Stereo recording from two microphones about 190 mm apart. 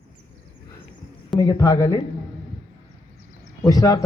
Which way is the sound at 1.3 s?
15° left (ahead or behind).